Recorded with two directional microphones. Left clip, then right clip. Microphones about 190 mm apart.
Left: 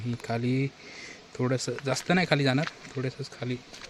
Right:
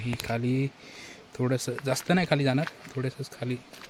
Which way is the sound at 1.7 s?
10° right (ahead or behind).